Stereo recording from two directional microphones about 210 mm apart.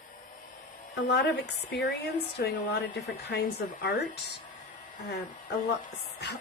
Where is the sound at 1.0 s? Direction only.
55° left (ahead or behind).